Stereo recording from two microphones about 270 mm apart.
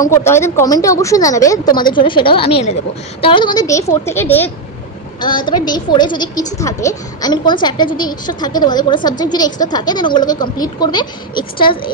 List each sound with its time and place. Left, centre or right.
0.0 s a woman's voice: centre